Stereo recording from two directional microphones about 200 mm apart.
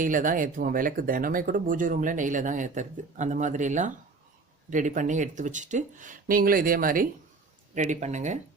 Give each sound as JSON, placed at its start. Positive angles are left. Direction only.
{"t": 0.0, "sound": "speech", "side_deg": -40}